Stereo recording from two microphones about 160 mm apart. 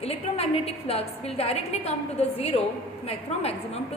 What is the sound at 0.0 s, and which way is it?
A woman's voice, 40° left (ahead or behind).